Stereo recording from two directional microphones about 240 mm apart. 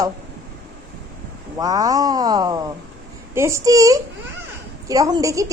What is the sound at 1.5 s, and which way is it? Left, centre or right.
A woman's voice, centre.